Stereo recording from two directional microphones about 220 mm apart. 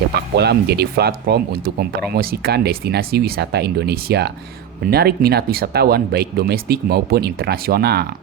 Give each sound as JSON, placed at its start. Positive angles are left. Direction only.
{"t": 0.3, "sound": "speech", "side_deg": -50}